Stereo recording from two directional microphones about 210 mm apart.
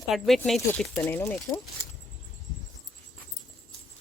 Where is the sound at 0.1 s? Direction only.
Centre (ahead or behind).